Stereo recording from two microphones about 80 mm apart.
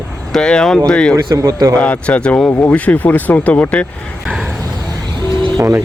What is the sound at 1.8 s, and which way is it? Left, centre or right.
A man's voice, centre.